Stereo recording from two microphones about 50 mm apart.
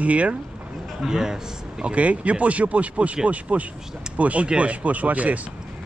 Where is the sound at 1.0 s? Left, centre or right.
Centre.